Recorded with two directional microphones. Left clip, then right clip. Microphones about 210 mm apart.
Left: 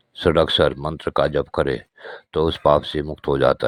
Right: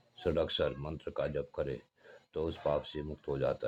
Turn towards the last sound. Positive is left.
turn(degrees=45)  # may be behind; listen again after turning